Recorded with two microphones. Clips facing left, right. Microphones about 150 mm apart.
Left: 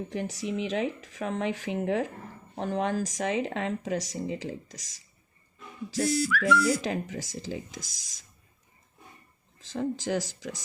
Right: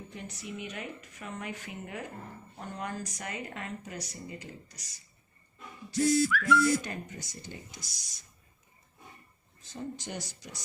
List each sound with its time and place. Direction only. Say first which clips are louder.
0.1 s speech: left 9 dB; 90° left
9.6 s speech: left 9 dB; 90° left